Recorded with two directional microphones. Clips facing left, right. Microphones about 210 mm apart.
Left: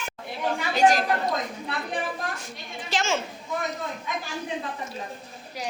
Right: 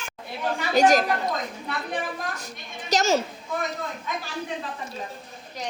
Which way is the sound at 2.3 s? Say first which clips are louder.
Left 1 dB; 40° right (ahead or behind).